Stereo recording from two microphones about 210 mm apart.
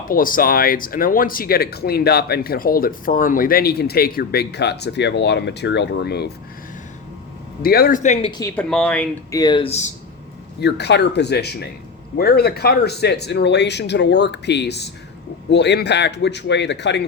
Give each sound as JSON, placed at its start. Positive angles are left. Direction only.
{"t": 0.1, "sound": "speech", "side_deg": 40}
{"t": 7.6, "sound": "speech", "side_deg": 45}
{"t": 8.3, "sound": "speech", "side_deg": 15}
{"t": 8.5, "sound": "speech", "side_deg": 5}
{"t": 9.3, "sound": "speech", "side_deg": 20}
{"t": 10.6, "sound": "a man's voice", "side_deg": 55}